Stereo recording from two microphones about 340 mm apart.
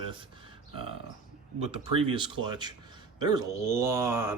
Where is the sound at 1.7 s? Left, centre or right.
Centre.